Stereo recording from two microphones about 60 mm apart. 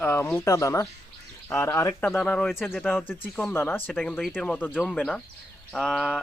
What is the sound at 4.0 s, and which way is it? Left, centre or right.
Speech, left.